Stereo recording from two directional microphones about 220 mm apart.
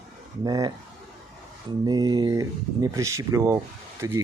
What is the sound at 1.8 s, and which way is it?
Speech, 20° right (ahead or behind).